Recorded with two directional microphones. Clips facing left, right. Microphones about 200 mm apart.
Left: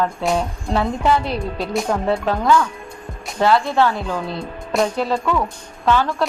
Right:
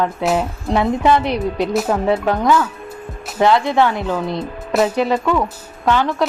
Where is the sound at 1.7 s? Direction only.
5° right (ahead or behind).